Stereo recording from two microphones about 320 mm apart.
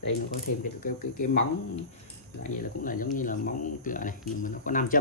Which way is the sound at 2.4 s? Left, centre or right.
Left.